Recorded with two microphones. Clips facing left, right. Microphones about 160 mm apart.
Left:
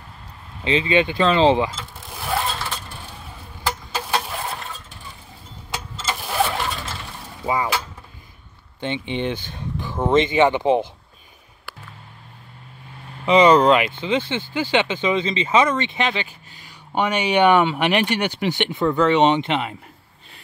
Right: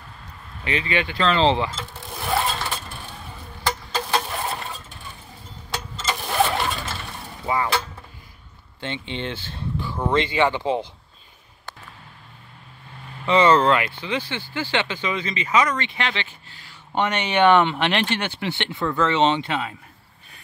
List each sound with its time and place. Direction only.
0.7 s speech: 20° left (ahead or behind)
1.7 s vehicle: centre (ahead or behind)
3.6 s a sound: 5° left (ahead or behind)
5.7 s a sound: 5° left (ahead or behind)
7.4 s speech: 15° left (ahead or behind)
8.8 s speech: 15° left (ahead or behind)
13.2 s speech: 15° left (ahead or behind)